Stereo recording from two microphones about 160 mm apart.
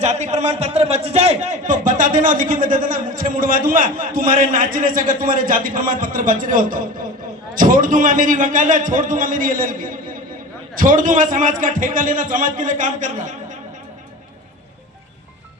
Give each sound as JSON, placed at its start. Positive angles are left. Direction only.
{"t": 0.0, "sound": "a man's voice", "side_deg": -45}